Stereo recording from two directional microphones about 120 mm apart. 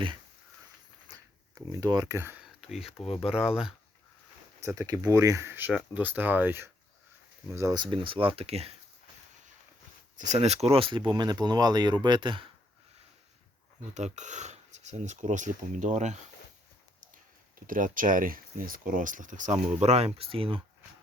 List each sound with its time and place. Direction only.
1.8 s speech: 35° right (ahead or behind)
2.6 s speech: 5° right (ahead or behind)
3.1 s speech: 55° left (ahead or behind)
3.3 s speech: 5° right (ahead or behind)
4.6 s speech: 25° right (ahead or behind)
7.8 s speech: 45° right (ahead or behind)
10.2 s speech: 70° right (ahead or behind); by 11.0 s 50° right (ahead or behind)
11.1 s speech: 35° right (ahead or behind)
13.9 s speech: 80° right
17.7 s speech: 90° right; by 20.6 s 50° right (ahead or behind)